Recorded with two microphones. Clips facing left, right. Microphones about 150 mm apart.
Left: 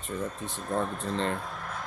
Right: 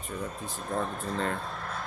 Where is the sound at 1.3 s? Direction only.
15° left (ahead or behind).